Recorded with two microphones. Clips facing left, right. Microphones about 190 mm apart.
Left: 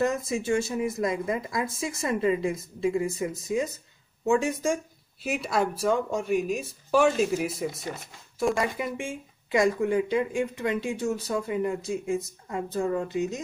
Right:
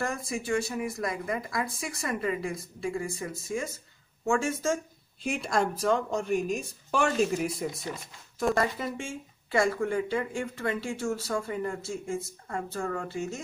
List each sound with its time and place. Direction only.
0.0 s a woman's voice: 20° left (ahead or behind)
5.2 s speech: 5° left (ahead or behind)